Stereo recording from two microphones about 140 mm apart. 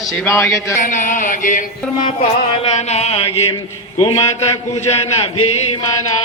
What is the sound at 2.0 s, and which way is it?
Music, 50° left (ahead or behind).